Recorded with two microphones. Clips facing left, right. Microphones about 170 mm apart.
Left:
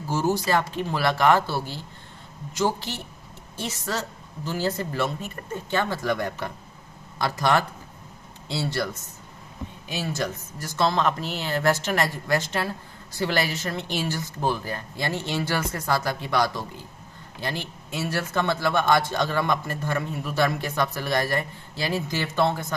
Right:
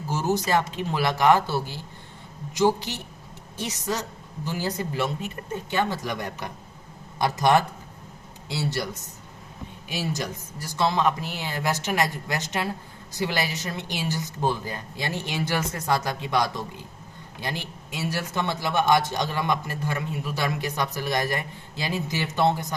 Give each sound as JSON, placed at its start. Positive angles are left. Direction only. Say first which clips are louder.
{"t": 0.1, "sound": "a woman's voice", "louder": "left 1 dB", "side_deg": -20}
{"t": 9.9, "sound": "a woman's voice", "louder": "left 1 dB", "side_deg": -15}